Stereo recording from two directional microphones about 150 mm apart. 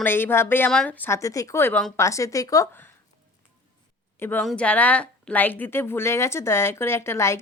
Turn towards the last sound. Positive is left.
turn(degrees=15)  # may be behind; listen again after turning